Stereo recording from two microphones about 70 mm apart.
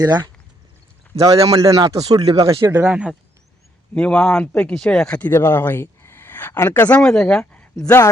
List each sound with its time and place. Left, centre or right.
0.0 s speech: right
1.2 s speech: right
2.8 s speech: centre
3.9 s speech: centre
5.3 s speech: left; by 7.1 s centre
7.1 s speech: centre